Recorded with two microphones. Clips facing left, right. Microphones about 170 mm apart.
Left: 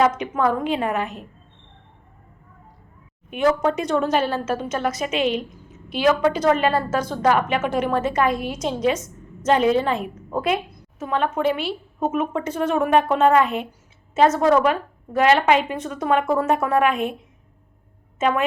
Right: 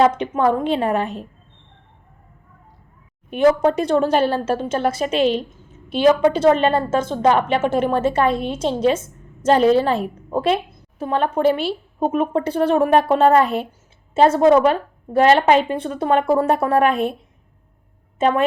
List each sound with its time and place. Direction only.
0.0 s a woman's voice: 30° right (ahead or behind)
3.2 s a woman's voice: 35° right (ahead or behind)
18.2 s a woman's voice: 30° right (ahead or behind)